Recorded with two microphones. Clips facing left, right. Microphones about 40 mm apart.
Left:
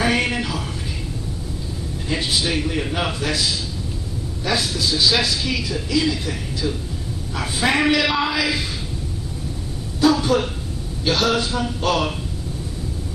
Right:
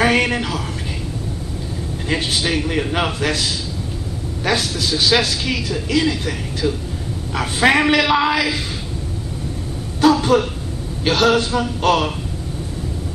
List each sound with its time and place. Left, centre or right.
0.0 s a sound: right
2.0 s a man's voice: right
4.5 s a man's voice: right
9.9 s a man's voice: right